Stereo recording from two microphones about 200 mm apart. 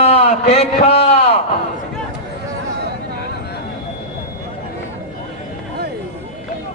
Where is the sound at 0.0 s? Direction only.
30° left (ahead or behind).